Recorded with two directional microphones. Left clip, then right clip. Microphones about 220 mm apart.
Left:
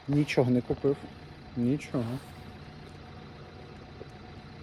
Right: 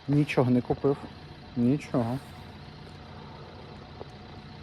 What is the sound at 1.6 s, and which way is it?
Speech, 10° left (ahead or behind).